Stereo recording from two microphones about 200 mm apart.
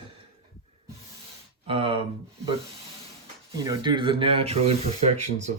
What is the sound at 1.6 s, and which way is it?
Speech, 25° right (ahead or behind).